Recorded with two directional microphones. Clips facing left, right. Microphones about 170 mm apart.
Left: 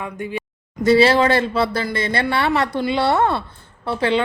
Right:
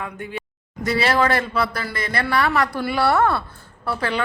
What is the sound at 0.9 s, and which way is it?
A woman's voice, 30° left (ahead or behind).